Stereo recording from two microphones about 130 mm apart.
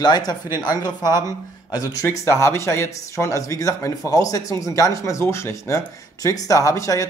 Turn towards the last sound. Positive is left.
turn(degrees=25)  # may be behind; listen again after turning